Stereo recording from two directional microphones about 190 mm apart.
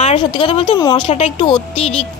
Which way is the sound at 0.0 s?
30° left (ahead or behind).